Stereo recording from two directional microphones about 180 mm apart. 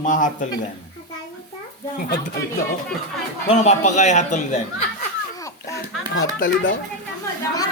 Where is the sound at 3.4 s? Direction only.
40° left (ahead or behind).